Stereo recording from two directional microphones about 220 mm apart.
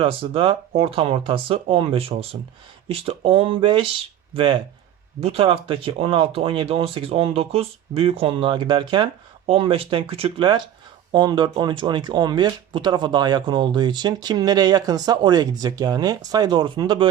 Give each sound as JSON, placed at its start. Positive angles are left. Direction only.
{"t": 0.0, "sound": "speech", "side_deg": -25}